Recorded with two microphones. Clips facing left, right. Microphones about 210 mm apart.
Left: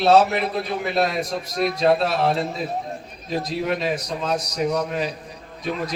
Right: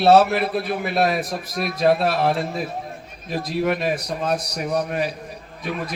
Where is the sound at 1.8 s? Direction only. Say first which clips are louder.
Right 2 dB; 60° right (ahead or behind).